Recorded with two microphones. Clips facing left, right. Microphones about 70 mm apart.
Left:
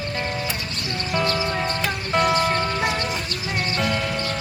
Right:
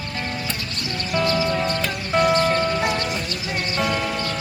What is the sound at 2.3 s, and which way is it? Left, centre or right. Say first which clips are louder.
Music: right 2 dB; centre.